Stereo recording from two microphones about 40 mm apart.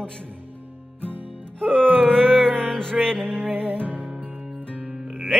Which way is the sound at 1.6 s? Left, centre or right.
Right.